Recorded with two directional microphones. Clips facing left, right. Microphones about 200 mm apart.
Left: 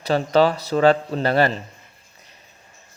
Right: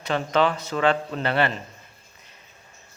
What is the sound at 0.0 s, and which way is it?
A man's voice, 35° left (ahead or behind).